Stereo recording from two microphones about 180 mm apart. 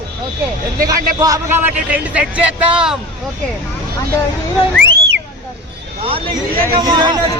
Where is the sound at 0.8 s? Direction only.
20° right (ahead or behind); by 3.0 s 5° right (ahead or behind).